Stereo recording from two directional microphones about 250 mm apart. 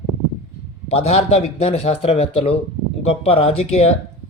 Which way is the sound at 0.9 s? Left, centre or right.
Left.